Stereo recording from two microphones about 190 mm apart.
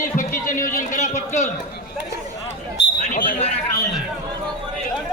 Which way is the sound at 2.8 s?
70° left (ahead or behind).